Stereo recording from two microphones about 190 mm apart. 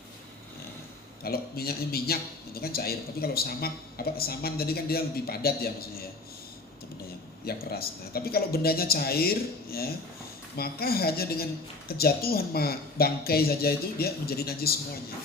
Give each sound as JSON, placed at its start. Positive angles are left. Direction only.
{"t": 1.2, "sound": "a man's voice", "side_deg": 55}
{"t": 7.4, "sound": "a man's voice", "side_deg": 55}